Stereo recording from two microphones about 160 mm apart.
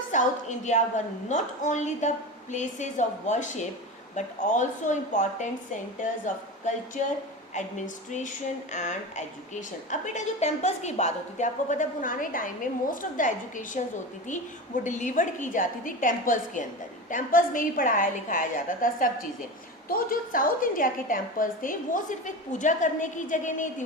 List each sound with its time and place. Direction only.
0.1 s a woman's voice: 50° left (ahead or behind)
7.5 s a woman's voice: 50° left (ahead or behind)
14.8 s a woman's voice: 50° left (ahead or behind)